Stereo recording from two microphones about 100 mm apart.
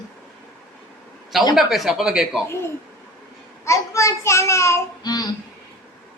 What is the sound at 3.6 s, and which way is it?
A child's voice, 30° left (ahead or behind).